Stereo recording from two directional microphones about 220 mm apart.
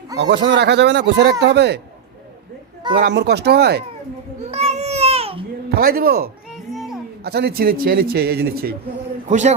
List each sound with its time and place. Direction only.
0.2 s speech: 50° right (ahead or behind)
3.0 s speech: 50° right (ahead or behind)
4.5 s baby cry: 30° right (ahead or behind)
5.6 s speech: 45° right (ahead or behind)
6.7 s a sound: centre (ahead or behind)
7.3 s speech: 45° right (ahead or behind)